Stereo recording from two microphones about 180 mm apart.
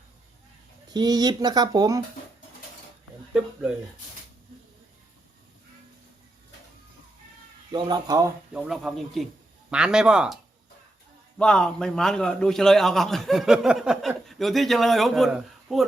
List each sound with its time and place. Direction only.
0.9 s speech: 20° right (ahead or behind)
7.7 s speech: 25° right (ahead or behind)
8.5 s a man's voice: 5° right (ahead or behind)
11.3 s a man's voice: 5° left (ahead or behind)